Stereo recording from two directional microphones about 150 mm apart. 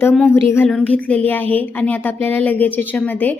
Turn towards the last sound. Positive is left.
turn(degrees=10)  # may be behind; listen again after turning